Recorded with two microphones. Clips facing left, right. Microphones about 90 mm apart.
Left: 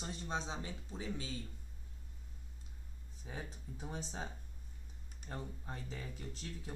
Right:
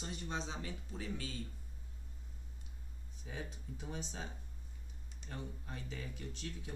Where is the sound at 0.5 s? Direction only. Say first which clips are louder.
Even; 20° left (ahead or behind).